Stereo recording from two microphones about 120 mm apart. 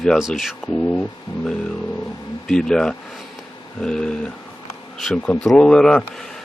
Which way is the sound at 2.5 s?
5° left (ahead or behind).